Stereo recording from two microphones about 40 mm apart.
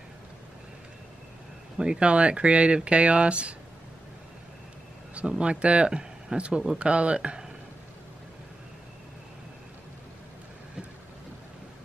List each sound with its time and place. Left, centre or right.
1.8 s speech: right
5.4 s speech: right